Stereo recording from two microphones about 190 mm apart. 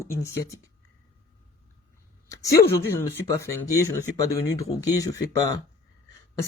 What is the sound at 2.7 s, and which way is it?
Speech, 15° left (ahead or behind).